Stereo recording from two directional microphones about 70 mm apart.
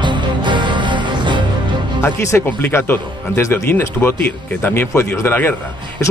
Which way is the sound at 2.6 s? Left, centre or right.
Left.